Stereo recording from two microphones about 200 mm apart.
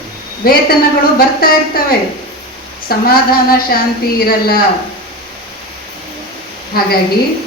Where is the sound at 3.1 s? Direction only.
50° left (ahead or behind).